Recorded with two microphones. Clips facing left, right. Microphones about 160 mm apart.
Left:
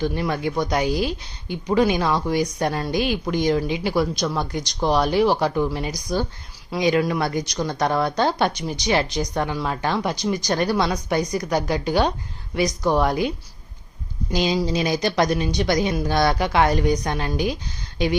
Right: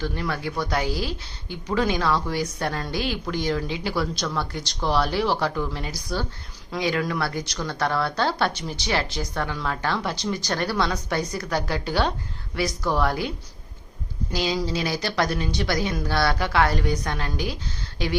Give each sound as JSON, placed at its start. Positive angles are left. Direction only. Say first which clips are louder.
{"t": 0.0, "sound": "a woman's voice", "louder": "left 5 dB", "side_deg": 15}